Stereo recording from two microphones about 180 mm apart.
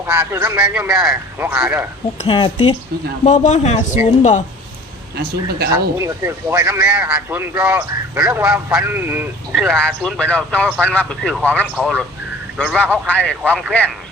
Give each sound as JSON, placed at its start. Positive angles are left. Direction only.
{"t": 0.0, "sound": "speech", "side_deg": -10}
{"t": 2.2, "sound": "speech", "side_deg": 30}
{"t": 3.2, "sound": "speech", "side_deg": 40}
{"t": 5.1, "sound": "speech", "side_deg": -60}
{"t": 5.7, "sound": "speech", "side_deg": -15}
{"t": 13.1, "sound": "speech", "side_deg": 10}